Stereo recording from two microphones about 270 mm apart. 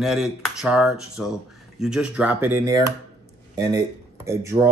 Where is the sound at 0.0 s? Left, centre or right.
Centre.